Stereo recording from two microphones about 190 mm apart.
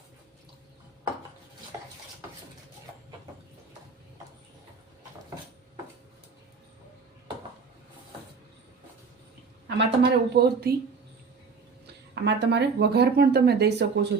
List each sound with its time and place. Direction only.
9.6 s speech: 65° right (ahead or behind)
12.1 s speech: 65° right (ahead or behind)